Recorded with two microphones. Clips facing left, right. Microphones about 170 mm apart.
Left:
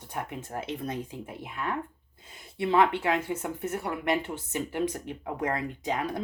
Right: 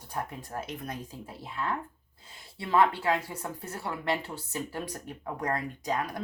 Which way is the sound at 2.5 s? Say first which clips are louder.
Left 2 dB; 20° left (ahead or behind).